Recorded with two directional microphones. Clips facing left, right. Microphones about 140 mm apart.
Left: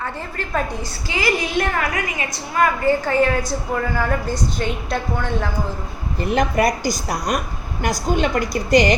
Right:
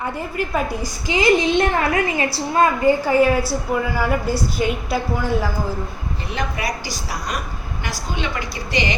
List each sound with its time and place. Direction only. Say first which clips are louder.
0.0 s a woman's voice: right 4 dB; 10° right (ahead or behind); by 2.6 s 30° right (ahead or behind)
2.8 s a woman's voice: right 2 dB; 10° right (ahead or behind)
6.1 s a woman's voice: left 9 dB; 50° left (ahead or behind)